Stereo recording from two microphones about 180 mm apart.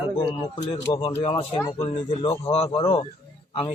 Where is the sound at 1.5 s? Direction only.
20° left (ahead or behind).